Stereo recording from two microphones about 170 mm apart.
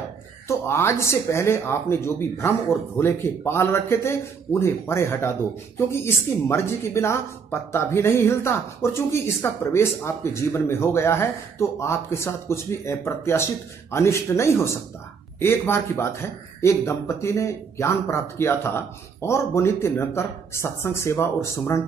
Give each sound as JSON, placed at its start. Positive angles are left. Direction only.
{"t": 0.5, "sound": "speech", "side_deg": 15}